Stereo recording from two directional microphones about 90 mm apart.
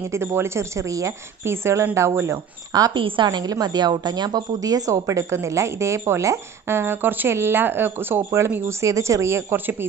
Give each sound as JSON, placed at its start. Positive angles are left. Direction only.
{"t": 0.1, "sound": "a woman's voice", "side_deg": -25}
{"t": 2.7, "sound": "a woman's voice", "side_deg": -45}
{"t": 8.8, "sound": "a woman's voice", "side_deg": -35}